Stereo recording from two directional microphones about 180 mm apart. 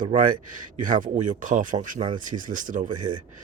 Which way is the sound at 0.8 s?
45° right (ahead or behind).